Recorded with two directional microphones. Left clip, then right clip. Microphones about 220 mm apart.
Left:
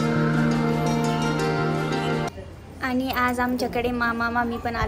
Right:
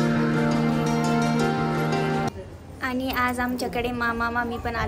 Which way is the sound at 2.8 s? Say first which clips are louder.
Left 1 dB; 5° right (ahead or behind).